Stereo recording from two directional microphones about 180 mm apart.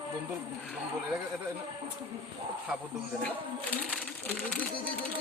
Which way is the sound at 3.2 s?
5° left (ahead or behind).